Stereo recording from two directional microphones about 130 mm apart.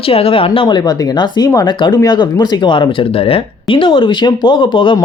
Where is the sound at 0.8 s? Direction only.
30° left (ahead or behind).